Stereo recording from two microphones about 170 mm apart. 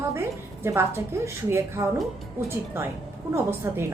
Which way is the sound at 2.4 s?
15° right (ahead or behind).